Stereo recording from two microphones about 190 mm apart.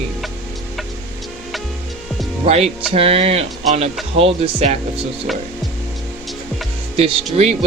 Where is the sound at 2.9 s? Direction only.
30° right (ahead or behind).